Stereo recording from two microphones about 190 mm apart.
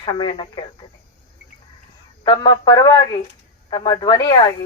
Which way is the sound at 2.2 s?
25° left (ahead or behind).